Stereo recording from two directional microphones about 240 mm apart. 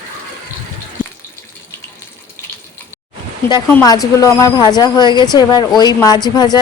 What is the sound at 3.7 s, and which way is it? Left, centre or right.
Speech, centre.